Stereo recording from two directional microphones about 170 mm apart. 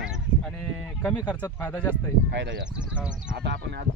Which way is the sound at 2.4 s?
90° right.